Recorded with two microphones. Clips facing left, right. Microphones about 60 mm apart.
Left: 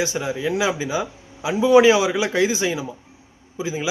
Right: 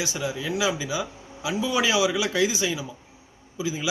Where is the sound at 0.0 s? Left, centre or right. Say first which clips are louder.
Left 6 dB; left.